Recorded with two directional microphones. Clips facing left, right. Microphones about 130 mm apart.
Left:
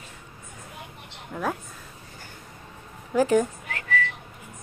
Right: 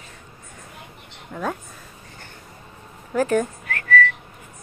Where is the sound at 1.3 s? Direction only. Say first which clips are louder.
Right 1 dB; 5° left (ahead or behind).